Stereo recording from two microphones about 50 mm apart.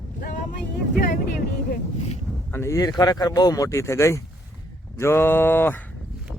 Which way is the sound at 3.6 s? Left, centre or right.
Left.